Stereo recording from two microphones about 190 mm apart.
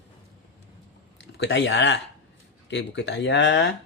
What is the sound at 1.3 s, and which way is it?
Speech, 70° left (ahead or behind).